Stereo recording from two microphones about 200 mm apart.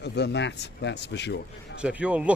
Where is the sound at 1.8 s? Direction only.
5° right (ahead or behind).